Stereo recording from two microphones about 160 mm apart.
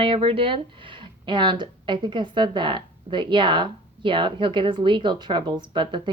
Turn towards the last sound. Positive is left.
turn(degrees=-30)  # may be behind; listen again after turning